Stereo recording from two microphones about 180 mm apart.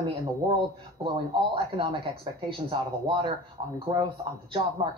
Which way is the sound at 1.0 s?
30° right (ahead or behind).